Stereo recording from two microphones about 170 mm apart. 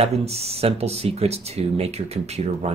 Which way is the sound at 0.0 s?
40° right (ahead or behind).